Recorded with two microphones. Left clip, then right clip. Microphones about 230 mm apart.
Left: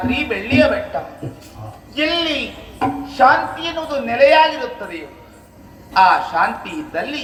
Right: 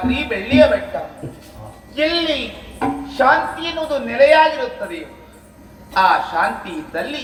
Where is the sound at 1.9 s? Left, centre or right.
Left.